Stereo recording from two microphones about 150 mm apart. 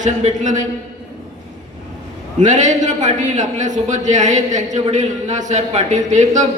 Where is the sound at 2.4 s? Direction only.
55° right (ahead or behind).